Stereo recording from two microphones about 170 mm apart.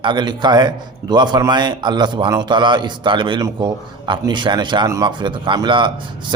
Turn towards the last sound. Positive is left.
turn(degrees=-25)  # may be behind; listen again after turning